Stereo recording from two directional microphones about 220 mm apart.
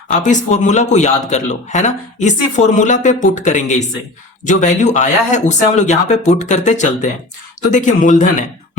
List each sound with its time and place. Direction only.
0.1 s a man's voice: 35° left (ahead or behind)